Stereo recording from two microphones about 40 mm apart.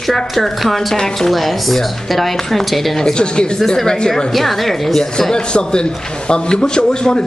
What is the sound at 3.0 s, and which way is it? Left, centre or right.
Speech, left.